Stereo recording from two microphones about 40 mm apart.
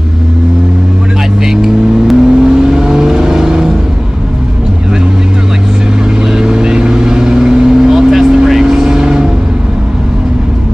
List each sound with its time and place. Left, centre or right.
1.4 s vehicle: centre
6.3 s vehicle: centre